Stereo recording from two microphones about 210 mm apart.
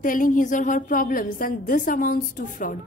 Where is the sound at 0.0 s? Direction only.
40° left (ahead or behind).